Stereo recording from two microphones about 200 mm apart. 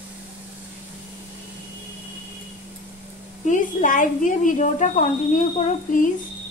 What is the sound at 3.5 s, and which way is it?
A woman's voice, 40° left (ahead or behind).